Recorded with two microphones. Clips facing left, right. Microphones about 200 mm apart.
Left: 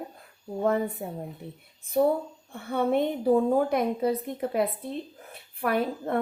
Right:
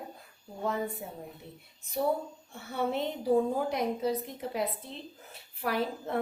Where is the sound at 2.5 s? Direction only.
55° left (ahead or behind).